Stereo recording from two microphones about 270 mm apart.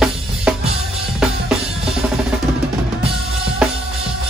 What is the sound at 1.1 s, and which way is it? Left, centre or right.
Drum kit, centre.